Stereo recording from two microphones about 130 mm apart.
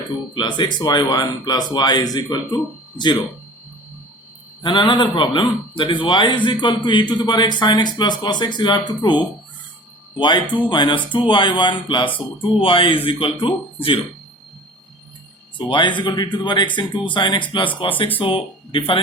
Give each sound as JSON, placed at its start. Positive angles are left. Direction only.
{"t": 0.3, "sound": "a man's voice", "side_deg": 35}
{"t": 4.6, "sound": "a man's voice", "side_deg": 40}
{"t": 15.5, "sound": "a man's voice", "side_deg": 35}